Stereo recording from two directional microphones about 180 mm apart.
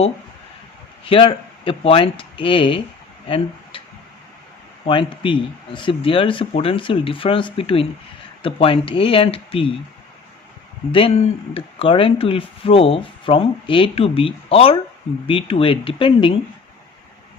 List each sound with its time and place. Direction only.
1.0 s speech: 30° left (ahead or behind)
4.9 s speech: 30° left (ahead or behind)
10.9 s speech: 30° left (ahead or behind)